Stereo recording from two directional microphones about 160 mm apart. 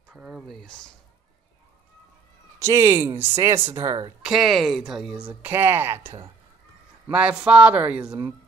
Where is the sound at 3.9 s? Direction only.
25° right (ahead or behind).